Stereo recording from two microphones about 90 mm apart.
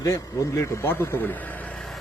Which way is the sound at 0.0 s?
35° left (ahead or behind).